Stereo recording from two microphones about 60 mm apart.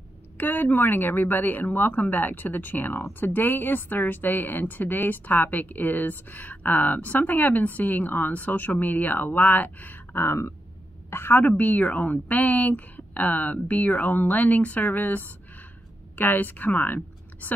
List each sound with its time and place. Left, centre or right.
0.4 s a woman's voice: left
11.5 s a woman's voice: left